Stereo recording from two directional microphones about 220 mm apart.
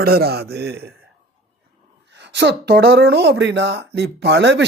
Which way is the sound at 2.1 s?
50° right (ahead or behind).